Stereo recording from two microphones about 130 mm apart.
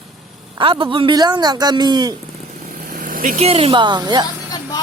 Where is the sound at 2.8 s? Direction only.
90° right.